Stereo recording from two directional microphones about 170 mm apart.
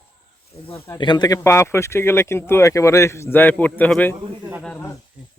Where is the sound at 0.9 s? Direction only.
25° left (ahead or behind); by 4.9 s 5° left (ahead or behind).